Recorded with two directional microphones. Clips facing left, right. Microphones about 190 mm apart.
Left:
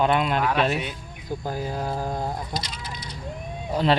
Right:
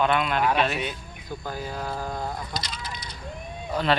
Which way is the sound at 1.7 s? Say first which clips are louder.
Left 3 dB; 20° left (ahead or behind).